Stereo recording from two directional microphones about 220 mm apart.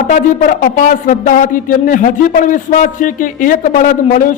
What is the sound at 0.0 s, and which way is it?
Speech, 40° left (ahead or behind).